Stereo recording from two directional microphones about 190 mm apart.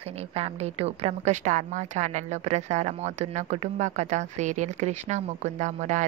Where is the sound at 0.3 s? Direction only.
35° right (ahead or behind).